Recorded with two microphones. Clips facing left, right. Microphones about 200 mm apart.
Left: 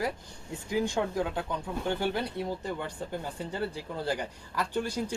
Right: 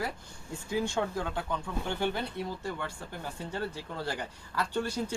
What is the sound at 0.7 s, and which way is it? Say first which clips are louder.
Speech: left 2 dB; 15° left (ahead or behind).